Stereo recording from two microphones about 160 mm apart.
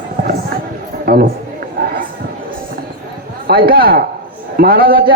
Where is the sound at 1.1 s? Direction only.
75° right (ahead or behind).